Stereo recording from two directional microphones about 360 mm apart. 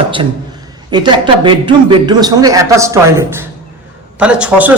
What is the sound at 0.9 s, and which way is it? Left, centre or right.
A man's voice, centre.